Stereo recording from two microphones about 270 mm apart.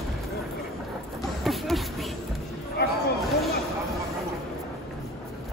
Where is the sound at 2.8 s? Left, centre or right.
Left.